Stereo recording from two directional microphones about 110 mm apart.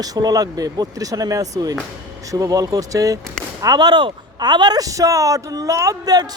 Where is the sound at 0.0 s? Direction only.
35° right (ahead or behind).